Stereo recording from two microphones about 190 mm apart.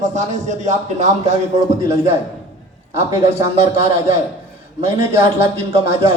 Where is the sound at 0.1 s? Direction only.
40° right (ahead or behind).